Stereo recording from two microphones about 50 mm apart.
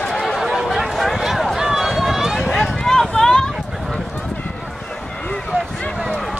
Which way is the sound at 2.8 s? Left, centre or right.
Centre.